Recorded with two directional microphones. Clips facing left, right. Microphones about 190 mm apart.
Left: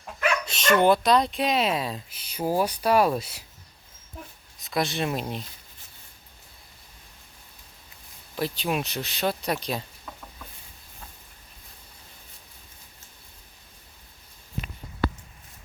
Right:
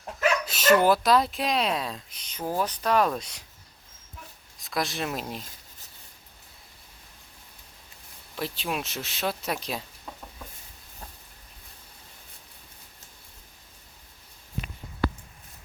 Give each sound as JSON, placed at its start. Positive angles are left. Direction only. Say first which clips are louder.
{"t": 0.4, "sound": "speech", "louder": "left 1 dB", "side_deg": -5}
{"t": 4.6, "sound": "speech", "louder": "left 3 dB", "side_deg": 0}
{"t": 8.4, "sound": "speech", "louder": "left 4 dB", "side_deg": 0}
{"t": 10.1, "sound": "chicken", "louder": "right 4 dB", "side_deg": -30}